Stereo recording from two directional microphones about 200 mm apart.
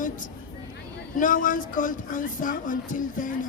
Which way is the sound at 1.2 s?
40° left (ahead or behind).